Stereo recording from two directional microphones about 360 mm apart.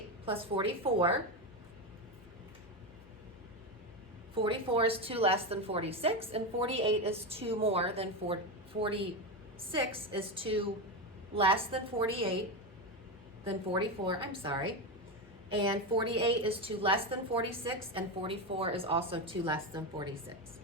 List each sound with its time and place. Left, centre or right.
0.3 s a woman's voice: centre
4.4 s a woman's voice: centre
13.4 s a woman's voice: centre